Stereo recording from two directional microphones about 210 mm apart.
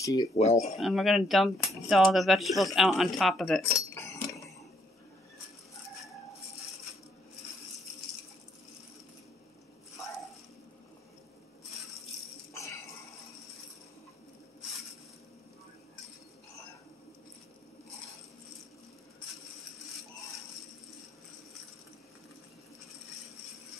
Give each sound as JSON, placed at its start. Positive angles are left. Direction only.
{"t": 0.0, "sound": "speech", "side_deg": 15}
{"t": 0.4, "sound": "speech", "side_deg": 30}
{"t": 0.7, "sound": "speech", "side_deg": 0}
{"t": 12.5, "sound": "music", "side_deg": 15}